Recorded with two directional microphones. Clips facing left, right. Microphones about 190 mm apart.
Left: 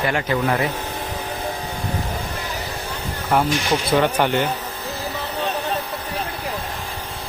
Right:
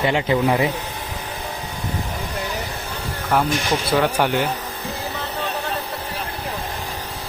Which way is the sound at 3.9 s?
Centre (ahead or behind).